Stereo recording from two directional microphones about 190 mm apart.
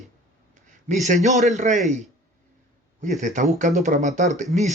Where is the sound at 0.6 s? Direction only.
40° right (ahead or behind).